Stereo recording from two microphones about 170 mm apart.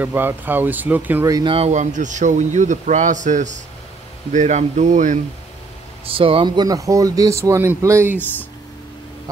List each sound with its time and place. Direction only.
0.0 s speech: 10° right (ahead or behind)
1.5 s speech: 40° right (ahead or behind)
6.0 s speech: 35° right (ahead or behind); by 8.2 s 15° right (ahead or behind)